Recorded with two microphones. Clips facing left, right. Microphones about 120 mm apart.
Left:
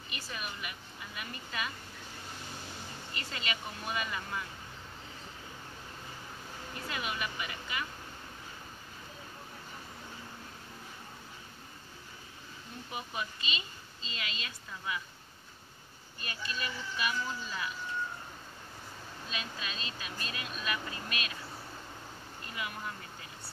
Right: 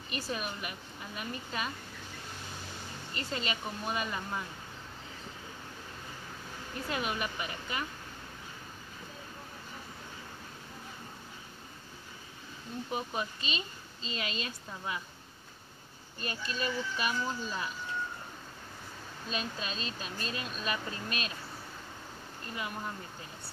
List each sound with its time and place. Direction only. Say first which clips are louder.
0.1 s a woman's voice: right 6 dB; 40° right (ahead or behind)
3.2 s a woman's voice: right 4 dB; 35° right (ahead or behind)
6.9 s a woman's voice: right 3 dB; 40° right (ahead or behind)
12.9 s a woman's voice: right 3 dB; 40° right (ahead or behind)
16.2 s a woman's voice: right 4 dB; 35° right (ahead or behind)
19.3 s a woman's voice: right 4 dB; 35° right (ahead or behind)